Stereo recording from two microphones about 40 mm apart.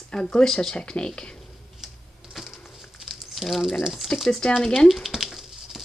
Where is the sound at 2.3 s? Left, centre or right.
Centre.